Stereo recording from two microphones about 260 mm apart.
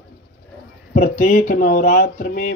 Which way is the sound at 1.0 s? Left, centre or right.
Left.